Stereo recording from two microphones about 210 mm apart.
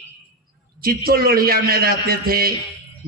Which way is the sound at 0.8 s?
45° right (ahead or behind).